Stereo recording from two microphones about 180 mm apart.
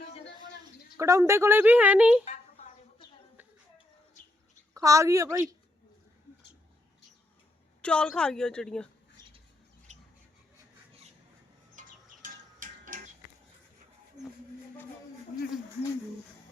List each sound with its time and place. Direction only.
0.9 s a woman's voice: 15° right (ahead or behind)
4.7 s a woman's voice: 20° right (ahead or behind)
7.8 s a woman's voice: 5° left (ahead or behind)
11.8 s chicken: 45° right (ahead or behind)
14.2 s a sound: 20° right (ahead or behind)